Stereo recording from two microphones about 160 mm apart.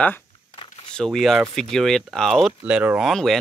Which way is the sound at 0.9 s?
Centre (ahead or behind).